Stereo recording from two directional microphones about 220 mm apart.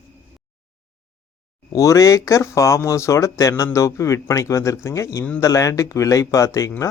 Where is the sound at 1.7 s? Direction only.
15° left (ahead or behind).